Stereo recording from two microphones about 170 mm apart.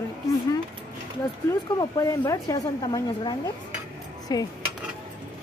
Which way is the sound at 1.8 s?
20° left (ahead or behind).